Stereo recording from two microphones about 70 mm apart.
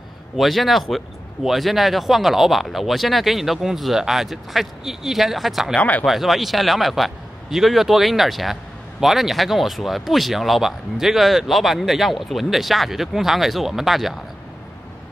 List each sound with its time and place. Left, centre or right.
0.4 s speech: centre
5.8 s speech: left
6.0 s speech: centre